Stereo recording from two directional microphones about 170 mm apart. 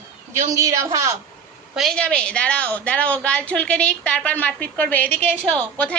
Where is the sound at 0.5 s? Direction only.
20° right (ahead or behind).